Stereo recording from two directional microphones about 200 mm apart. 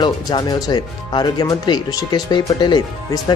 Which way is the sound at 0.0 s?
20° left (ahead or behind).